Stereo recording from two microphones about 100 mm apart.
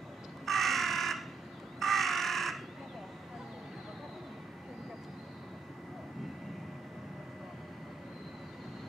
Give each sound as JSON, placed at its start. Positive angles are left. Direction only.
{"t": 0.5, "sound": "crow", "side_deg": 0}